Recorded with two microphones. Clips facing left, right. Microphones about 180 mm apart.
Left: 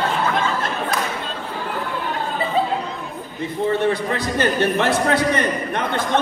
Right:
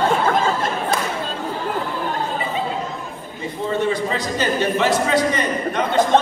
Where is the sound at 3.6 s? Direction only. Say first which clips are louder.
Left 1 dB; 60° left (ahead or behind).